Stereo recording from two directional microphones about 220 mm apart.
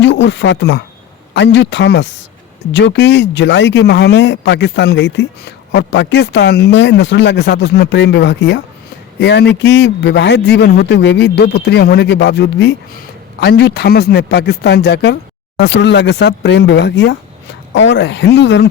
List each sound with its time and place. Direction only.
0.0 s speech: 55° left (ahead or behind)